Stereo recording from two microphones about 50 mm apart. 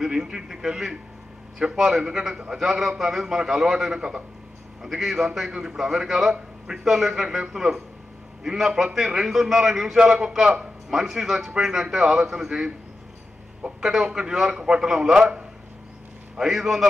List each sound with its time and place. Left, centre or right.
0.0 s a man's voice: centre
13.6 s a sound: centre
13.8 s a man's voice: centre